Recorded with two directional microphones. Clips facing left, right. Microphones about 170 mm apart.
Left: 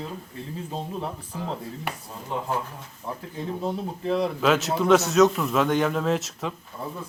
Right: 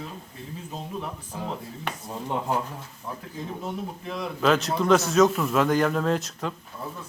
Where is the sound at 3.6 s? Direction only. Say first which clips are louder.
Left 5 dB; 35° left (ahead or behind).